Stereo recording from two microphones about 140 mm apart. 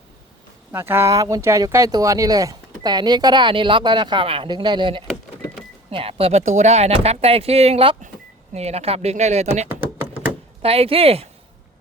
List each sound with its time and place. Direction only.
0.7 s speech: 15° right (ahead or behind); by 9.6 s 50° right (ahead or behind)
9.8 s a sound: 15° right (ahead or behind)
10.6 s speech: 45° right (ahead or behind)